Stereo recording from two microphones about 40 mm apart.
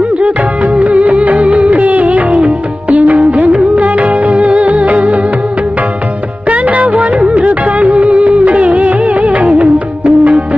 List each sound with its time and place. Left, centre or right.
0.2 s music: right
3.3 s music of bollywood: right
6.5 s music: right